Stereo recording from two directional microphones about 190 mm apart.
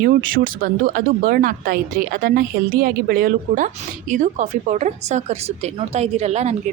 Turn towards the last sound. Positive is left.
turn(degrees=-35)  # may be behind; listen again after turning